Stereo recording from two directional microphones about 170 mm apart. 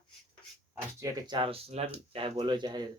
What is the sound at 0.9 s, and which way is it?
Speech, 25° right (ahead or behind).